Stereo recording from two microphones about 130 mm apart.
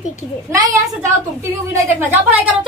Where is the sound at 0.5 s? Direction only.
25° right (ahead or behind).